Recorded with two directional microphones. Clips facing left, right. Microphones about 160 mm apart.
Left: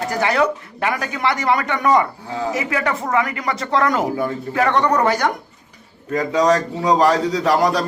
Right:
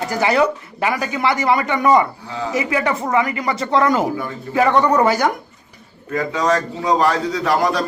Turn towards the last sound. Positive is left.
turn(degrees=40)  # may be behind; listen again after turning